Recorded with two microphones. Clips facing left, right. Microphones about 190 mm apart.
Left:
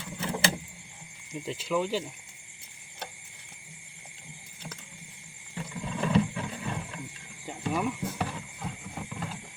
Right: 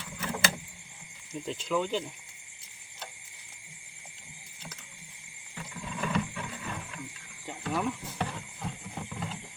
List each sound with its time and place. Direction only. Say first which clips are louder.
0.2 s vehicle: left 2 dB; 25° left (ahead or behind)
1.3 s speech: left 1 dB; 5° left (ahead or behind)
5.8 s a sound: left 6 dB; 30° left (ahead or behind)
7.6 s horse: left 2 dB; 10° left (ahead or behind)